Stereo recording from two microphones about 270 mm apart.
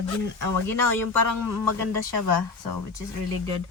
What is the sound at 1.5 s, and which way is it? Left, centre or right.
Speech, right.